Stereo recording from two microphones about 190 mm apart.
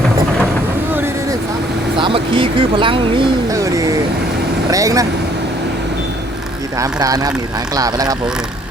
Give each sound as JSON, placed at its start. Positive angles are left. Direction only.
{"t": 2.0, "sound": "a sound", "side_deg": -25}
{"t": 4.7, "sound": "speech", "side_deg": -15}
{"t": 6.7, "sound": "speech", "side_deg": -20}